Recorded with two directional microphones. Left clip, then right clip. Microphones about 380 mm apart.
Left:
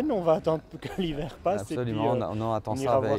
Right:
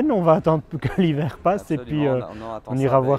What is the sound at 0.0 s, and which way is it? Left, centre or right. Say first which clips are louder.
Speech: right 7 dB; right.